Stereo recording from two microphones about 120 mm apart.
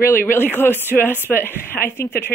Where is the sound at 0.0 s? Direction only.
20° left (ahead or behind).